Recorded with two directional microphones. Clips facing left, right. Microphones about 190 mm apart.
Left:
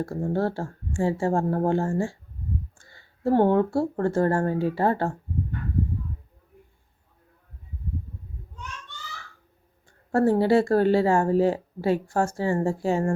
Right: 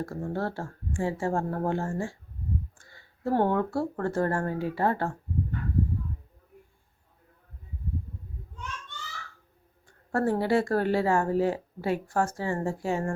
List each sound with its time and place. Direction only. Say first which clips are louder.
0.0 s speech: left 5 dB; 30° left (ahead or behind)
9.8 s speech: left 5 dB; 25° left (ahead or behind)